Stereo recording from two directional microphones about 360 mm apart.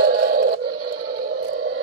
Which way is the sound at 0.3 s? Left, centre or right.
Right.